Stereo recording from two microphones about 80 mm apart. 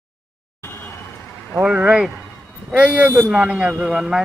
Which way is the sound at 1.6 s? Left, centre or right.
Centre.